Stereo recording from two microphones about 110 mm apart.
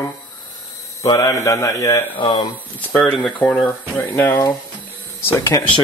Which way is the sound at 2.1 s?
45° left (ahead or behind).